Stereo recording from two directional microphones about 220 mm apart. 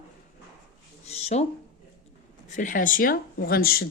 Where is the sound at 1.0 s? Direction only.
30° left (ahead or behind).